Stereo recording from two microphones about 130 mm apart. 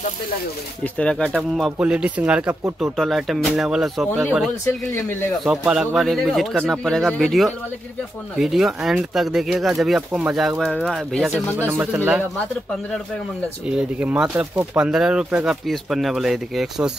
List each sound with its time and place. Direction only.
0.9 s a man's voice: 5° left (ahead or behind)
11.5 s speech: 20° right (ahead or behind)
13.7 s a man's voice: 5° right (ahead or behind)